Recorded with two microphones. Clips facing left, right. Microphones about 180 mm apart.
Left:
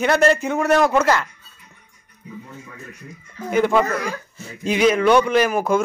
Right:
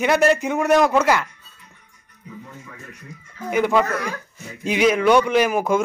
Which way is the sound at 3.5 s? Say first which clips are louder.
Left 1 dB; 10° right (ahead or behind).